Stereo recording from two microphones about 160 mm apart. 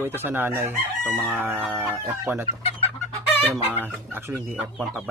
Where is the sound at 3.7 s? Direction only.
15° right (ahead or behind).